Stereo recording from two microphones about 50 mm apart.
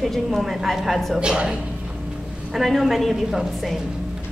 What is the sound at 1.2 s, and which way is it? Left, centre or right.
Speech, centre.